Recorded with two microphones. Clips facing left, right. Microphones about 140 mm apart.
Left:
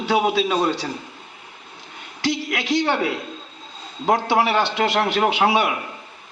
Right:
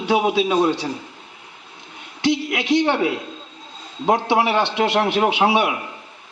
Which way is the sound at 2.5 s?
20° right (ahead or behind).